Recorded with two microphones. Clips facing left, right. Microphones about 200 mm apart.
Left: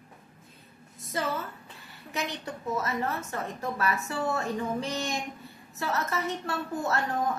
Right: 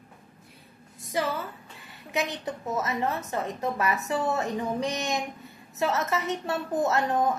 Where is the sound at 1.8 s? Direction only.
15° right (ahead or behind).